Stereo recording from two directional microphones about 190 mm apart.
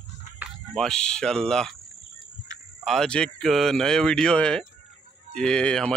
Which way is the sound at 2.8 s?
Centre (ahead or behind).